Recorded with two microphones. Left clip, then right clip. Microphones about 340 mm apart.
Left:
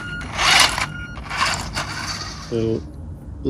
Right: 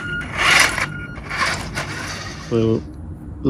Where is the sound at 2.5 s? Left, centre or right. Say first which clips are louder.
Right 4 dB; right.